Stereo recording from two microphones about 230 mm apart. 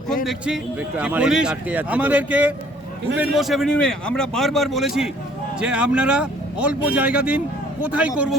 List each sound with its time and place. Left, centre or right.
0.3 s a man's voice: centre